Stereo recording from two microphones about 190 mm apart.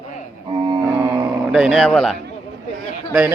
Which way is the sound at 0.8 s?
10° right (ahead or behind).